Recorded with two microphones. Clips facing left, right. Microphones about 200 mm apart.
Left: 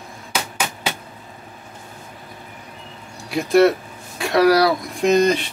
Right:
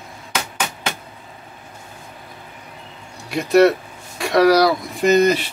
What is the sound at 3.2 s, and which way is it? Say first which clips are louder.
Speech: right 1 dB; centre (ahead or behind).